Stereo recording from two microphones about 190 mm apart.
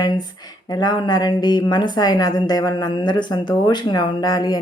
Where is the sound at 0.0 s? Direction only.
20° left (ahead or behind).